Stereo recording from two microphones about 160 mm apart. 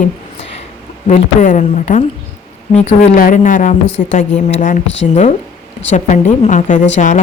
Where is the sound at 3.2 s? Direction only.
55° left (ahead or behind).